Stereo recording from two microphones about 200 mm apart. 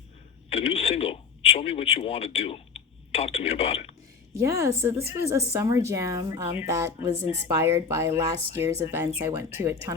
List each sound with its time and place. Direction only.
0.5 s speech: 30° left (ahead or behind)
4.4 s speech: 15° right (ahead or behind)